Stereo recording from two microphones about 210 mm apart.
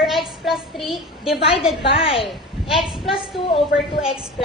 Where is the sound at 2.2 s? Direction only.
Centre (ahead or behind).